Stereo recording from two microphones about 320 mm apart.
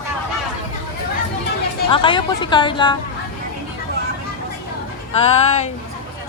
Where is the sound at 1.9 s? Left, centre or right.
Centre.